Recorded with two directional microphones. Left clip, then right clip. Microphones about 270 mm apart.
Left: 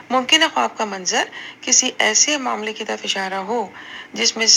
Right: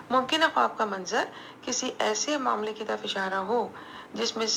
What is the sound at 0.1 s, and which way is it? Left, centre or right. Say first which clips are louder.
Speech: left 8 dB; left.